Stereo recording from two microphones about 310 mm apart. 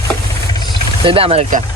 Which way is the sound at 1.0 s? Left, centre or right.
Centre.